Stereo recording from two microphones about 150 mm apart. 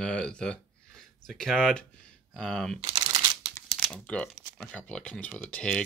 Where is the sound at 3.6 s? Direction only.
5° left (ahead or behind).